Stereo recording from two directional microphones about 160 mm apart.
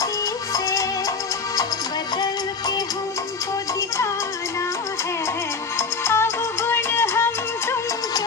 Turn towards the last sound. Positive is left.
turn(degrees=15)  # may be behind; listen again after turning